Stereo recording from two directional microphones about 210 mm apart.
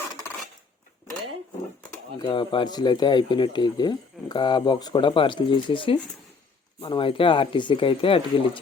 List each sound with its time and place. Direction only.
2.1 s speech: 20° left (ahead or behind)